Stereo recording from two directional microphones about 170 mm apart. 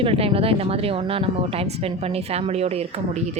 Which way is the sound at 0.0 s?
35° right (ahead or behind).